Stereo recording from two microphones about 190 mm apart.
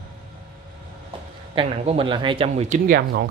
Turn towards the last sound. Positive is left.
turn(degrees=-60)  # may be behind; listen again after turning